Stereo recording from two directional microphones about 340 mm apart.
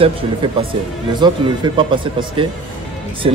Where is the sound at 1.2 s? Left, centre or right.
Centre.